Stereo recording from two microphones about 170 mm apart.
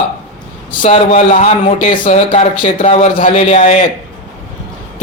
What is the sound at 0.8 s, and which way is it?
Speech, 35° left (ahead or behind).